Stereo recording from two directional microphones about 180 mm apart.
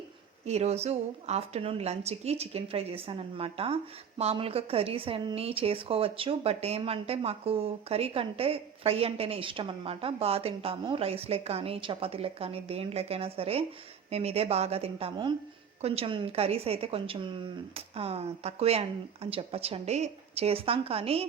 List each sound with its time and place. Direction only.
0.4 s a woman's voice: 35° right (ahead or behind)